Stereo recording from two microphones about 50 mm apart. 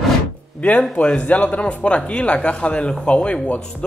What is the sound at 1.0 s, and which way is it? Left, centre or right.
Speech, centre.